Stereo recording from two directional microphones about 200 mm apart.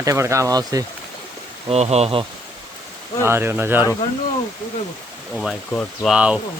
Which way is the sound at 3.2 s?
10° right (ahead or behind).